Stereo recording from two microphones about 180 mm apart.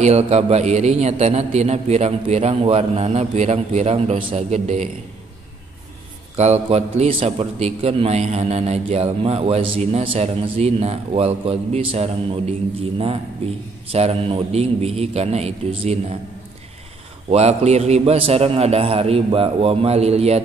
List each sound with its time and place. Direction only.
0.0 s a man's voice: 35° right (ahead or behind)
6.3 s a man's voice: 35° right (ahead or behind)
17.3 s a man's voice: 35° right (ahead or behind)